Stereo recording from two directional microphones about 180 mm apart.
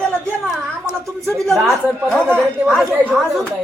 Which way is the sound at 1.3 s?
Centre (ahead or behind).